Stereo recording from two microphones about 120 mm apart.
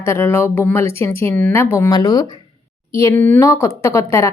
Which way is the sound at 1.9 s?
35° left (ahead or behind).